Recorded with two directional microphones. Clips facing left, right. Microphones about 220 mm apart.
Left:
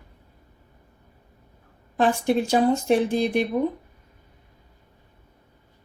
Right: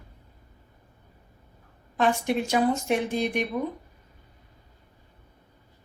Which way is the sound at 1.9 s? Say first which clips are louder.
Left 3 dB; 35° left (ahead or behind).